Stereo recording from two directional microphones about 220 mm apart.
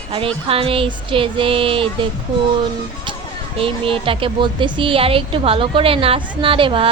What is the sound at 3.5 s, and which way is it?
A woman's voice, 25° right (ahead or behind).